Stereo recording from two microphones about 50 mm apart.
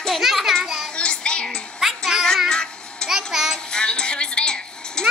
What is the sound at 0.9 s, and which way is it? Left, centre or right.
Child singing, left.